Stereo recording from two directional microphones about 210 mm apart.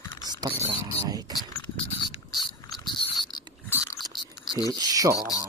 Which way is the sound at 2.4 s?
20° left (ahead or behind).